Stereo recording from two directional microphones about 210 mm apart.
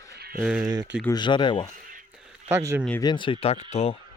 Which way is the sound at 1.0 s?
20° left (ahead or behind).